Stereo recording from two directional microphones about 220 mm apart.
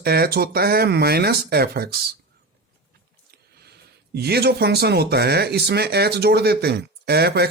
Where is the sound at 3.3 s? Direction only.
45° right (ahead or behind).